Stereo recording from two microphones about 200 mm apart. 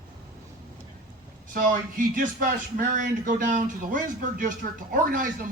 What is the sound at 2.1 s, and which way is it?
A man's voice, 40° right (ahead or behind).